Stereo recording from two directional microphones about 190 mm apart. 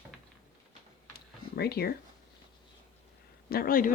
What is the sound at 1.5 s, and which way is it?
Speech, 55° left (ahead or behind).